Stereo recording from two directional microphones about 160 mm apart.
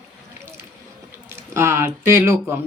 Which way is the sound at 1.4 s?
15° right (ahead or behind).